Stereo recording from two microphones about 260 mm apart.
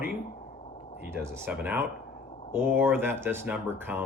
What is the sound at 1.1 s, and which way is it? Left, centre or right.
Speech, centre.